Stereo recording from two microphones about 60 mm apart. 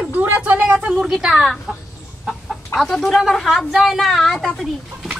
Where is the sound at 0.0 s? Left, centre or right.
Right.